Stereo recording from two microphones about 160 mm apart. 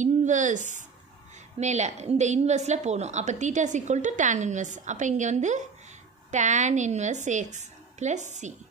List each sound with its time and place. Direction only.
0.0 s a woman's voice: 50° right (ahead or behind)